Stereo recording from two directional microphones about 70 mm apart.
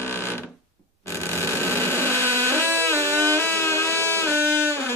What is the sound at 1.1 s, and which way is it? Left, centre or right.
Vehicle, left.